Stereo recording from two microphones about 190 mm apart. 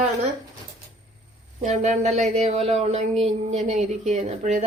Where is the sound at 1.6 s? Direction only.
35° right (ahead or behind).